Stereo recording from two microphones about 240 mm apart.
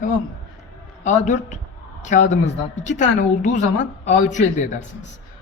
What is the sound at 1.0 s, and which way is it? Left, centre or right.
A man's voice, left.